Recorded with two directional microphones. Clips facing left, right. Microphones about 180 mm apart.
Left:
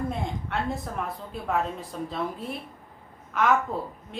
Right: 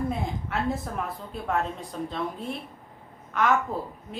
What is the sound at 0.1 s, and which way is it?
A woman's voice, centre (ahead or behind).